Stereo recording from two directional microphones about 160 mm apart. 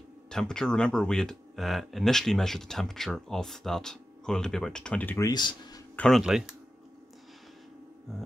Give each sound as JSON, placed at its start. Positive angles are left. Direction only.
{"t": 0.3, "sound": "speech", "side_deg": 5}
{"t": 5.3, "sound": "speech", "side_deg": 25}
{"t": 5.9, "sound": "speech", "side_deg": 0}